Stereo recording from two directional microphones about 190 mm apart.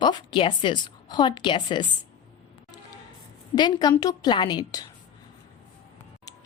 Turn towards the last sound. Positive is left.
turn(degrees=20)  # may be behind; listen again after turning